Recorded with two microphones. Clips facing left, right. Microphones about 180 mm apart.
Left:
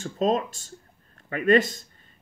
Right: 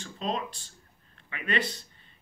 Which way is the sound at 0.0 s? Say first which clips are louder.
Left 9 dB; 45° left (ahead or behind).